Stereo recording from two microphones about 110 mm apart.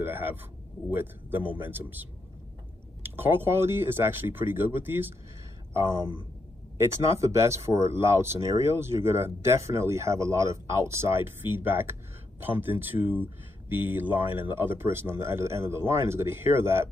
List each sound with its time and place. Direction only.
0.0 s speech: 20° right (ahead or behind)
7.2 s speech: 25° right (ahead or behind)